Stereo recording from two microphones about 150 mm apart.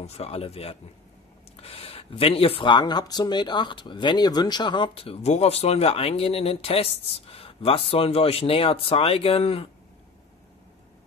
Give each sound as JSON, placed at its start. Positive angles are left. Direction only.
{"t": 0.0, "sound": "speech", "side_deg": 45}